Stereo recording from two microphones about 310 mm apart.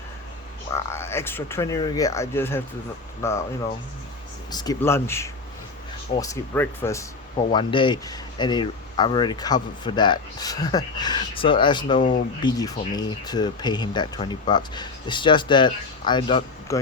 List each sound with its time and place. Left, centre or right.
0.7 s speech: centre
4.5 s speech: centre